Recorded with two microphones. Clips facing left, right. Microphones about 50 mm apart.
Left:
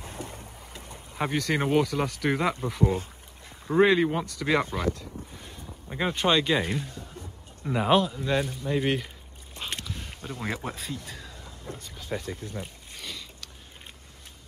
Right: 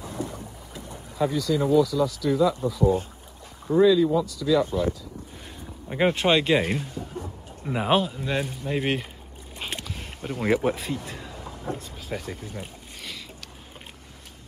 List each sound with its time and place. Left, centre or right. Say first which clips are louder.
1.1 s speech: right 3 dB; left
3.6 s speech: right 3 dB; left
5.9 s speech: right 4 dB; right
6.3 s speech: even; centre
6.6 s speech: right 3 dB; right
7.6 s speech: even; centre
9.6 s a sound: right 1 dB; centre
10.5 s speech: right 14 dB; right
11.1 s vehicle: right 5 dB; right
12.0 s boat: even; centre